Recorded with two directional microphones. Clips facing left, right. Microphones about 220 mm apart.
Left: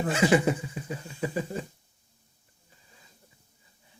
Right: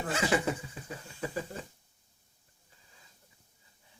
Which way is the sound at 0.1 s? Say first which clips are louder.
Left 7 dB; 15° left (ahead or behind).